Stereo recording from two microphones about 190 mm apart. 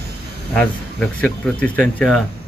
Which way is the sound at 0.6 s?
5° left (ahead or behind).